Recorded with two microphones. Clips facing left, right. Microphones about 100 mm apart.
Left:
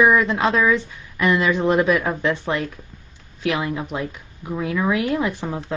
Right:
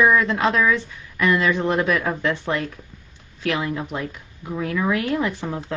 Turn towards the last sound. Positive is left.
turn(degrees=10)  # may be behind; listen again after turning